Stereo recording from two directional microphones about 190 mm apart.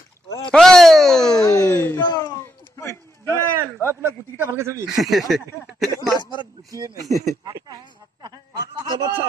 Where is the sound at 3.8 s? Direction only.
15° right (ahead or behind).